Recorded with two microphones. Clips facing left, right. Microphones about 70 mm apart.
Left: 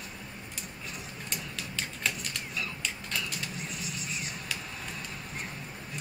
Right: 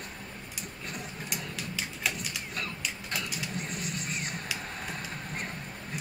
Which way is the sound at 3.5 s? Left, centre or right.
Right.